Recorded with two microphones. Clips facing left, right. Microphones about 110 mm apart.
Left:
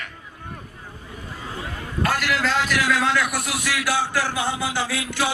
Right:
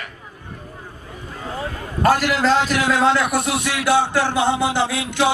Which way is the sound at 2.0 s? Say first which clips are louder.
Right 7 dB; 35° right (ahead or behind).